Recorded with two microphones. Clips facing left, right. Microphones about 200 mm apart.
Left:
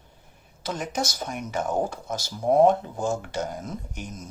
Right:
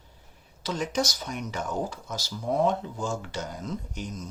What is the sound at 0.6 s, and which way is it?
Speech, 50° left (ahead or behind).